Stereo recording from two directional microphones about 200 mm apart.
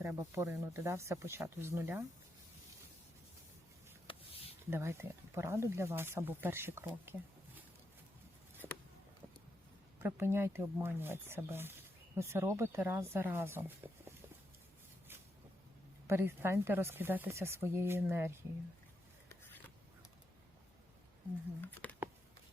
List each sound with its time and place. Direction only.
0.0 s speech: 15° right (ahead or behind)
4.0 s a sound: 30° left (ahead or behind)
4.7 s speech: 15° right (ahead or behind)
10.0 s speech: 10° right (ahead or behind)
16.0 s speech: 10° right (ahead or behind)
21.6 s speech: 10° left (ahead or behind)